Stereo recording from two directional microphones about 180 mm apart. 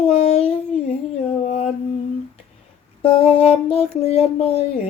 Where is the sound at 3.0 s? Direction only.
30° left (ahead or behind).